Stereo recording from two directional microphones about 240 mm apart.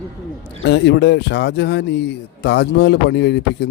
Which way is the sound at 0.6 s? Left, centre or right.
Left.